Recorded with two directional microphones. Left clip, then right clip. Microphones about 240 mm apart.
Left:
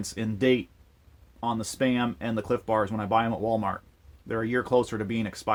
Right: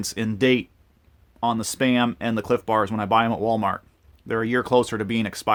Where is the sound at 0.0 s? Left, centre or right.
Right.